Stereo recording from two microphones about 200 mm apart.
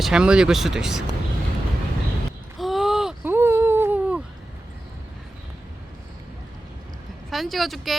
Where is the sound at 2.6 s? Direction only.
Centre (ahead or behind).